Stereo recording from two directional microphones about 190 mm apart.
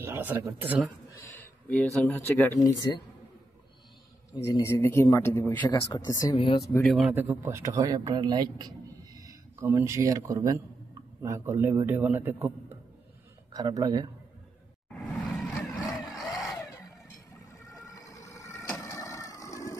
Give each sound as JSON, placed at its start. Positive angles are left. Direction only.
{"t": 0.0, "sound": "a man's voice", "side_deg": -10}
{"t": 1.2, "sound": "a sound", "side_deg": 10}
{"t": 2.0, "sound": "a man's voice", "side_deg": 10}
{"t": 4.6, "sound": "a man's voice", "side_deg": 15}
{"t": 5.7, "sound": "speech", "side_deg": 20}
{"t": 6.3, "sound": "speech", "side_deg": 30}
{"t": 6.8, "sound": "speech", "side_deg": 0}
{"t": 7.2, "sound": "a man's voice", "side_deg": -10}
{"t": 14.9, "sound": "vehicle", "side_deg": 0}
{"t": 17.8, "sound": "vehicle", "side_deg": 15}